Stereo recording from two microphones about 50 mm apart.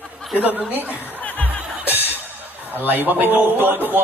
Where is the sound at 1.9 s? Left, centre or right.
Right.